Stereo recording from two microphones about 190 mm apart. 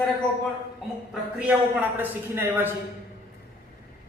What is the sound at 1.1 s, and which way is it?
A woman's voice, 5° right (ahead or behind).